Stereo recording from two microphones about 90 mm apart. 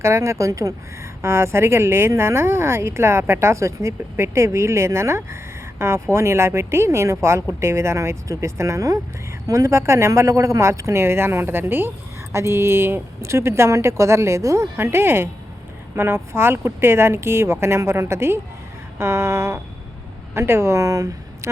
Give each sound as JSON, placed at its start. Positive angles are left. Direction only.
{"t": 0.0, "sound": "a woman's voice", "side_deg": -30}